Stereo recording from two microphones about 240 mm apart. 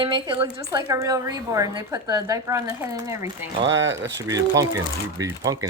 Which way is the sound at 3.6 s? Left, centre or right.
Right.